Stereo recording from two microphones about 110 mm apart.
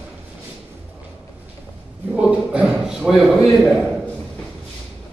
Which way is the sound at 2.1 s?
10° right (ahead or behind).